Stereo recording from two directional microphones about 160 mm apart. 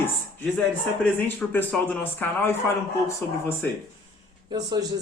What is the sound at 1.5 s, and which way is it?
Speech, 10° left (ahead or behind).